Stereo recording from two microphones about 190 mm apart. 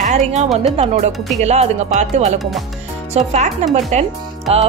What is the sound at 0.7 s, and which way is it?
A woman's voice, 35° right (ahead or behind).